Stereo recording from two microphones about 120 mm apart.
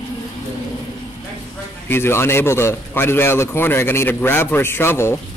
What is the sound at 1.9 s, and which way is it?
A man's voice, 20° left (ahead or behind).